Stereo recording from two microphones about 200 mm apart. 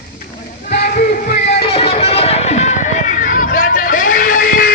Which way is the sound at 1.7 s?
30° left (ahead or behind).